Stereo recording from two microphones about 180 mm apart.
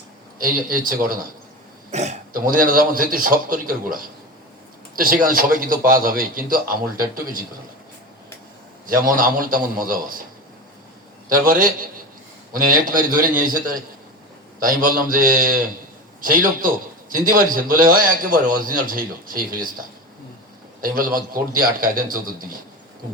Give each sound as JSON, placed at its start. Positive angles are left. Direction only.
{"t": 0.3, "sound": "a man's voice", "side_deg": -50}
{"t": 1.9, "sound": "a man's voice", "side_deg": -40}
{"t": 9.0, "sound": "a man's voice", "side_deg": -50}
{"t": 11.3, "sound": "a man's voice", "side_deg": -50}
{"t": 14.8, "sound": "a man's voice", "side_deg": -50}
{"t": 20.8, "sound": "a man's voice", "side_deg": -50}